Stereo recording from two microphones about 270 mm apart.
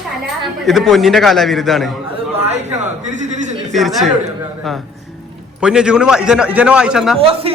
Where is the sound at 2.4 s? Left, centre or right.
Right.